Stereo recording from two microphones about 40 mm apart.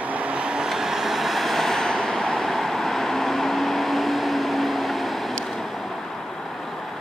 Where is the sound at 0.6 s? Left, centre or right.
Centre.